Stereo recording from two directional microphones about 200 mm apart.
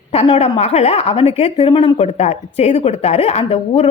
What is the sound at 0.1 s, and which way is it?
A woman's voice, 30° left (ahead or behind).